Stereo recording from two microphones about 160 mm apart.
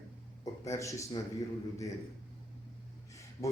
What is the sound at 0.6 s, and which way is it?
Speech, 20° left (ahead or behind).